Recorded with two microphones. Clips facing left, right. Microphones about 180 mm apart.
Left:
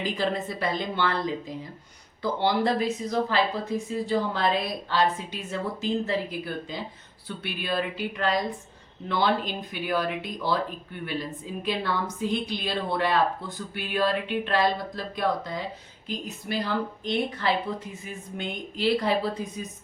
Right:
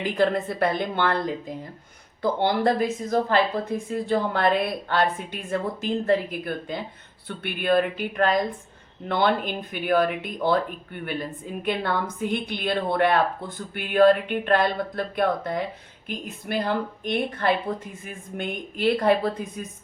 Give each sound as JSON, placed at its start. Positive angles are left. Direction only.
{"t": 0.0, "sound": "a woman's voice", "side_deg": -55}